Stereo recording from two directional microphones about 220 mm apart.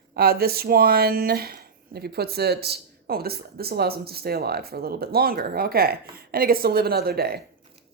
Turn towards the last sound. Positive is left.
turn(degrees=-45)  # may be behind; listen again after turning